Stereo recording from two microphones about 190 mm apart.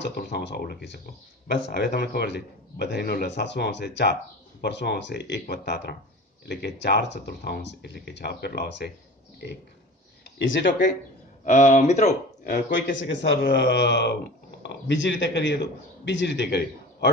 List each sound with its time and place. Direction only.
0.0 s a man's voice: 60° left (ahead or behind)
11.4 s speech: 40° left (ahead or behind)
13.0 s a man's voice: 60° left (ahead or behind)